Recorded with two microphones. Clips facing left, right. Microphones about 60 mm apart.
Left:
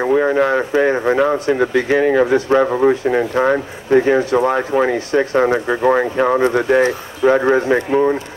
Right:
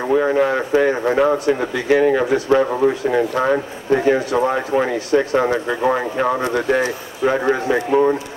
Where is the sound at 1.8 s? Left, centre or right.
Left.